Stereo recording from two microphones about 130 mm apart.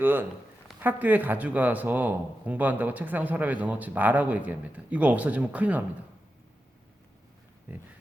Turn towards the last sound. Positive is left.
turn(degrees=-10)  # may be behind; listen again after turning